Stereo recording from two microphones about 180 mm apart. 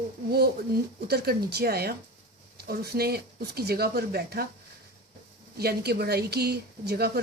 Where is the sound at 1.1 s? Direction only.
65° right (ahead or behind).